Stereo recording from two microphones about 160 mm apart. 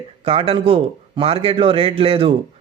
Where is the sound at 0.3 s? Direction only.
35° right (ahead or behind).